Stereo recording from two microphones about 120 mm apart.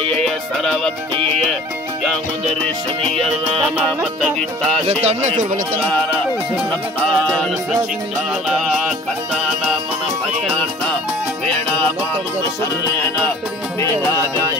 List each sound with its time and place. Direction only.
0.2 s music: centre (ahead or behind)
3.2 s music: 5° left (ahead or behind)
4.8 s speech: 70° right (ahead or behind)
7.1 s music: 5° left (ahead or behind)
13.7 s speech: 25° left (ahead or behind)